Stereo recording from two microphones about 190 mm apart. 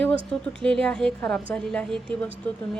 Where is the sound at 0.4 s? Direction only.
5° left (ahead or behind).